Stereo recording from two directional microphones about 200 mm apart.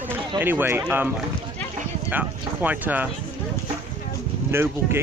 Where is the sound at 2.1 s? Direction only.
10° right (ahead or behind).